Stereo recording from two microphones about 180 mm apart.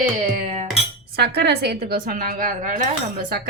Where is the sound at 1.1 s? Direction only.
65° right (ahead or behind); by 2.8 s 50° right (ahead or behind).